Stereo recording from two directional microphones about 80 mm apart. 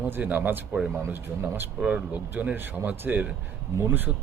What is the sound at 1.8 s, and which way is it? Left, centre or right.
Speech, centre.